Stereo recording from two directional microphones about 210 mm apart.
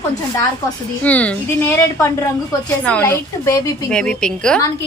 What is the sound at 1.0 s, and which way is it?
A woman's voice, 5° left (ahead or behind).